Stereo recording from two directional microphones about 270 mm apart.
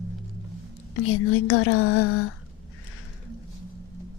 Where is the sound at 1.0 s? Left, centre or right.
Left.